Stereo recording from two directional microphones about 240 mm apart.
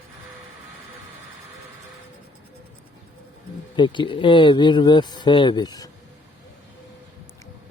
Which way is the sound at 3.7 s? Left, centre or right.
Centre.